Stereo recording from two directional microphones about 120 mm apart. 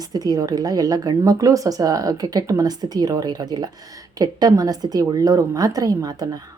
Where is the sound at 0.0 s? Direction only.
30° right (ahead or behind).